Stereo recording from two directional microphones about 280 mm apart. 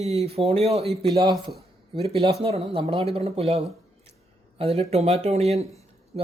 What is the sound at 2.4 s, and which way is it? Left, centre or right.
Speech, right.